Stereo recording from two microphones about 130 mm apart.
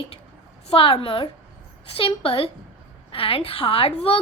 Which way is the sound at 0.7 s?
45° left (ahead or behind).